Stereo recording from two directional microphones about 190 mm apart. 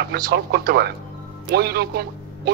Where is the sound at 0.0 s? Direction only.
55° right (ahead or behind).